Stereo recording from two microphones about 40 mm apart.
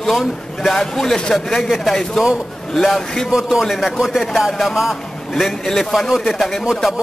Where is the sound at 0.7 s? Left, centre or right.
Centre.